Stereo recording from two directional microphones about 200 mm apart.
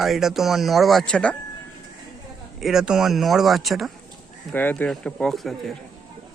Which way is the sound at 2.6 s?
Centre (ahead or behind).